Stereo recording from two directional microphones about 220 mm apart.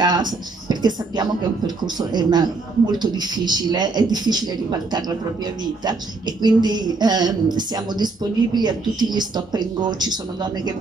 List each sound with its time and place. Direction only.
0.0 s speech: 20° right (ahead or behind)
6.4 s speech: 20° right (ahead or behind)